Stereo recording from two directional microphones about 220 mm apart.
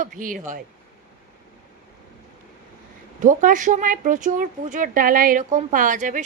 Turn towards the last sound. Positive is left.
turn(degrees=-35)  # may be behind; listen again after turning